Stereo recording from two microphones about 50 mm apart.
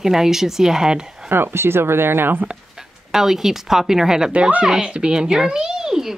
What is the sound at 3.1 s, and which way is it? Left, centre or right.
Speech, centre.